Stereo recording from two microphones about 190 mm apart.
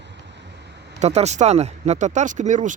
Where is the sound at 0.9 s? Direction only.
35° right (ahead or behind).